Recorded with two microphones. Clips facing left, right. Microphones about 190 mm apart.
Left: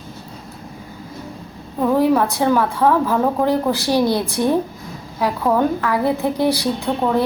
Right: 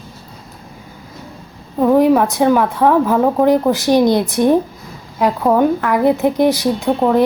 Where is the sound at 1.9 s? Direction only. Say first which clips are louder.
Right 4 dB; 15° right (ahead or behind).